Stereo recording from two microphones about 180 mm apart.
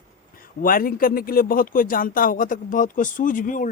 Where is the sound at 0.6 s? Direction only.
50° left (ahead or behind).